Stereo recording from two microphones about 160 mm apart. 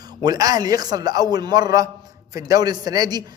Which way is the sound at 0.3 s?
25° right (ahead or behind).